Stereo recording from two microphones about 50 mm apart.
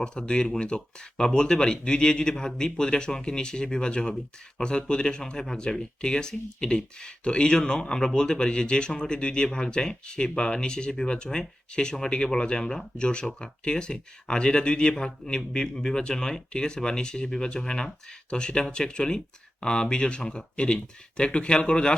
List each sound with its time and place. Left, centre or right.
0.0 s speech: centre